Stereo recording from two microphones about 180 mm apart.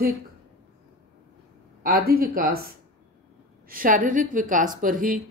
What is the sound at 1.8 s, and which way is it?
Speech, 55° right (ahead or behind).